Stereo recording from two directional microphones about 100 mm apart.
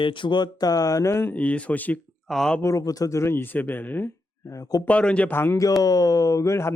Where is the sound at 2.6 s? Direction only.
35° left (ahead or behind).